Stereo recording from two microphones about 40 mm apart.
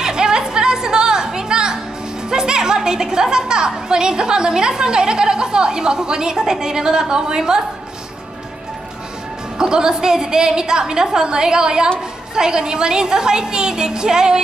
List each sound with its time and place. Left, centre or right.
0.0 s music: centre
2.2 s a woman's voice: centre
9.6 s a woman's voice: centre